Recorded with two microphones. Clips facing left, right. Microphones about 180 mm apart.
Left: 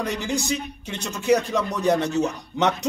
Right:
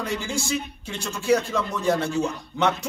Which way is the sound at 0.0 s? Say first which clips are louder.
Left 2 dB; 20° left (ahead or behind).